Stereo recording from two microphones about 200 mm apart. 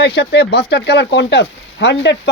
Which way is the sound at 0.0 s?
55° left (ahead or behind).